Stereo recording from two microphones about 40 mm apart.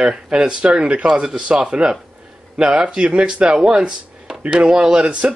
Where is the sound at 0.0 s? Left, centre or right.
Centre.